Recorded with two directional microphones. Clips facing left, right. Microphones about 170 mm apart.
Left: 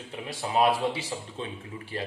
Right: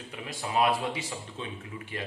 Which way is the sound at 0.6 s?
30° left (ahead or behind).